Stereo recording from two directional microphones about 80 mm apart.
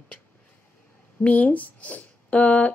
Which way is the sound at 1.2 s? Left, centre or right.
Centre.